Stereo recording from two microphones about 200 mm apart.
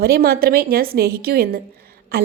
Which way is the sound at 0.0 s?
50° right (ahead or behind).